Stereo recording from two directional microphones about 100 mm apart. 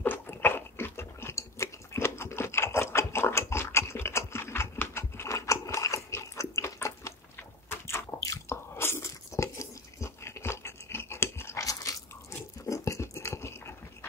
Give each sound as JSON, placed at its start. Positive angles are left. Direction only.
{"t": 0.0, "sound": "chewing", "side_deg": 20}
{"t": 7.8, "sound": "biting", "side_deg": 30}